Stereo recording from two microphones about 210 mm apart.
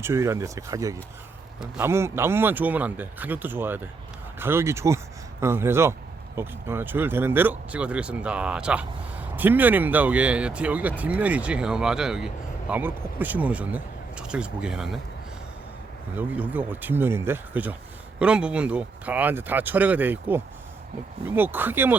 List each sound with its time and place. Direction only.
0.0 s speech: 15° right (ahead or behind)
16.1 s speech: 5° right (ahead or behind)